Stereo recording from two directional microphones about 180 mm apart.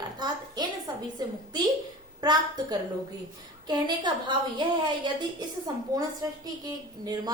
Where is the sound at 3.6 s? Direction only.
25° right (ahead or behind).